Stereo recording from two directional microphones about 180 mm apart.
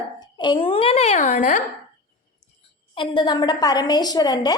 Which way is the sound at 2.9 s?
25° left (ahead or behind).